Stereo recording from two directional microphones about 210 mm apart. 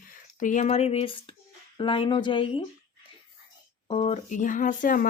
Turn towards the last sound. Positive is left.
turn(degrees=40)  # may be behind; listen again after turning